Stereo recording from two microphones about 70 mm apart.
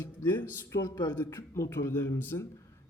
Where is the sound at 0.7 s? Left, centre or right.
Left.